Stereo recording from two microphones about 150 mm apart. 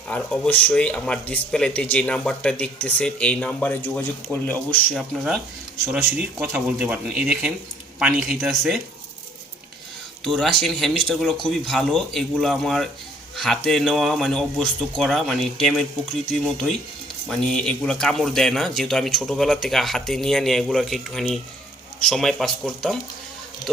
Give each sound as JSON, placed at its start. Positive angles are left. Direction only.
{"t": 0.1, "sound": "speech", "side_deg": 10}
{"t": 5.1, "sound": "speech", "side_deg": 0}
{"t": 10.2, "sound": "speech", "side_deg": 0}